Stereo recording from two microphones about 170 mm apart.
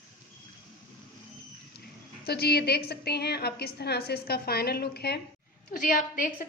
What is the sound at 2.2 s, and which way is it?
A woman's voice, 70° left (ahead or behind).